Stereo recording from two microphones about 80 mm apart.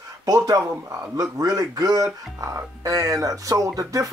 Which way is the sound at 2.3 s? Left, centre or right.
Right.